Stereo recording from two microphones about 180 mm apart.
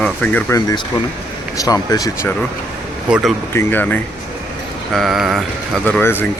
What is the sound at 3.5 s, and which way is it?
Speech, 10° left (ahead or behind).